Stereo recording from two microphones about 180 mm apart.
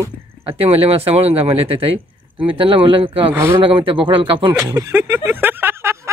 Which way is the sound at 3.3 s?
15° right (ahead or behind).